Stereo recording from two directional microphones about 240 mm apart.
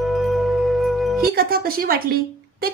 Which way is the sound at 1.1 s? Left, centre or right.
Right.